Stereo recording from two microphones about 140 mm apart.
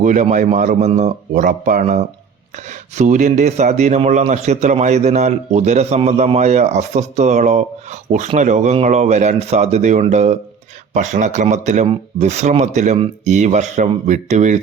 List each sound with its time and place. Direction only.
0.0 s a man's voice: 60° right (ahead or behind); by 2.0 s 75° right (ahead or behind)
3.0 s a man's voice: 60° right (ahead or behind)